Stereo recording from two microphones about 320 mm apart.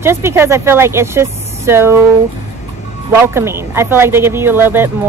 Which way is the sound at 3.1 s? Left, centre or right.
Centre.